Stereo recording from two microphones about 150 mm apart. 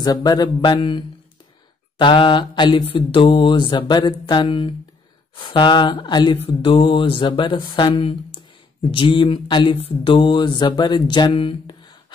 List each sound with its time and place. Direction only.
0.0 s speech: 25° left (ahead or behind)